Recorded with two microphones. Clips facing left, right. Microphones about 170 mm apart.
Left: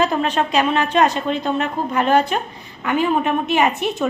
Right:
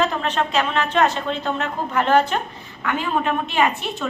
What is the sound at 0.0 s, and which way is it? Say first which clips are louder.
A woman's voice: left 3 dB; 15° left (ahead or behind).